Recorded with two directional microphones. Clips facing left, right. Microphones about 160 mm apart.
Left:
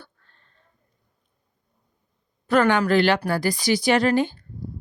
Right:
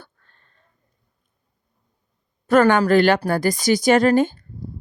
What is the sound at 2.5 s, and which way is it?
Speech, 45° right (ahead or behind).